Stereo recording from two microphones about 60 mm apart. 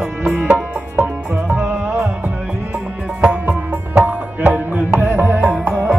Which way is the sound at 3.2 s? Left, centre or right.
Right.